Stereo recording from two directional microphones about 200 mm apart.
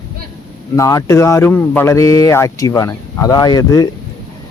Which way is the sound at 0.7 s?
15° left (ahead or behind).